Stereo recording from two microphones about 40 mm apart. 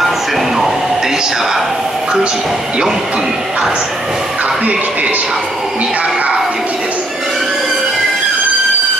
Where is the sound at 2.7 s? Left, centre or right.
Centre.